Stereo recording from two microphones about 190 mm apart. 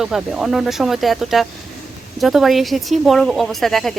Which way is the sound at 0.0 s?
Centre (ahead or behind).